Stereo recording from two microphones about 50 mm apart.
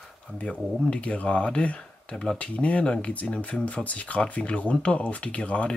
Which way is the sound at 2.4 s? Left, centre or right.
Left.